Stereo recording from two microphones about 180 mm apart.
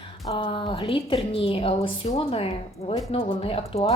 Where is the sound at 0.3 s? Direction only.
25° left (ahead or behind).